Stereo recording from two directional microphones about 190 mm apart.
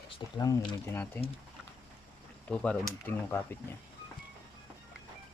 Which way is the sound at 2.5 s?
10° left (ahead or behind).